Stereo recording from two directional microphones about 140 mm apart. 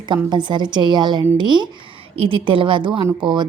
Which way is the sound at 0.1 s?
35° right (ahead or behind).